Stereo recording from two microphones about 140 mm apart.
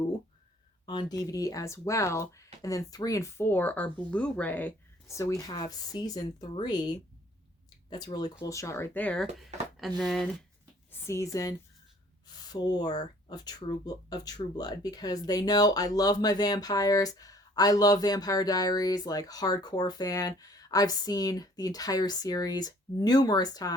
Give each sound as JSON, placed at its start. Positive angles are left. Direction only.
{"t": 0.9, "sound": "speech", "side_deg": 30}
{"t": 11.0, "sound": "speech", "side_deg": 20}